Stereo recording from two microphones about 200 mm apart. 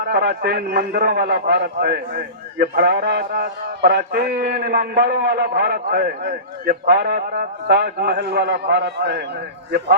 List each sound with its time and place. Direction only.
0.0 s a man's voice: 50° right (ahead or behind)